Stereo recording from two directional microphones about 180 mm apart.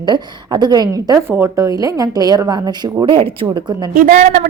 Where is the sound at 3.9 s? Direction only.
50° right (ahead or behind).